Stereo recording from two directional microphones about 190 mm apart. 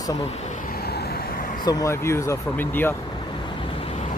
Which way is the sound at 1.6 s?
20° left (ahead or behind).